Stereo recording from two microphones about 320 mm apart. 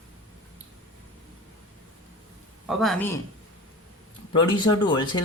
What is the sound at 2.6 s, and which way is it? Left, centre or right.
Speech, centre.